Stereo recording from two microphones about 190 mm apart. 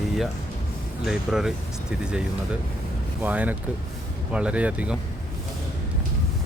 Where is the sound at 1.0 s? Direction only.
Centre (ahead or behind).